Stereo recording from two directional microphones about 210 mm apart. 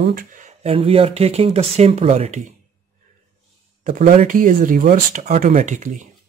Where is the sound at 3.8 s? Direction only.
35° right (ahead or behind).